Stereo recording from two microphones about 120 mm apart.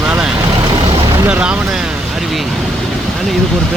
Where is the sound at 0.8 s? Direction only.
50° right (ahead or behind).